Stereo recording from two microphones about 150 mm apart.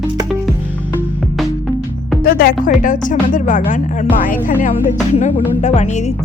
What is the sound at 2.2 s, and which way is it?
Music, 80° left.